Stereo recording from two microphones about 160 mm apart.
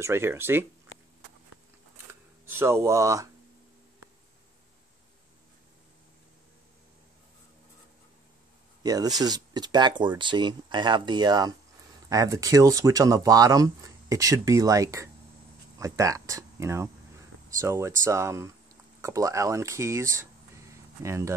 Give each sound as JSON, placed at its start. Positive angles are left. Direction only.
{"t": 0.0, "sound": "speech", "side_deg": -15}
{"t": 2.4, "sound": "speech", "side_deg": -15}
{"t": 8.8, "sound": "speech", "side_deg": -25}